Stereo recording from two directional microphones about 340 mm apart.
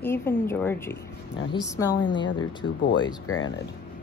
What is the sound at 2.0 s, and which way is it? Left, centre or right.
Speech, centre.